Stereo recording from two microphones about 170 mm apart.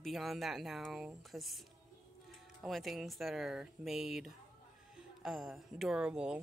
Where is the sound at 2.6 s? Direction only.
Centre (ahead or behind).